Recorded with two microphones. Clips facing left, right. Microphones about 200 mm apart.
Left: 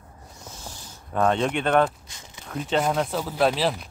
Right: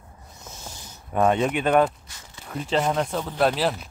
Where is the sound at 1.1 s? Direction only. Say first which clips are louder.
Right 1 dB; 10° right (ahead or behind).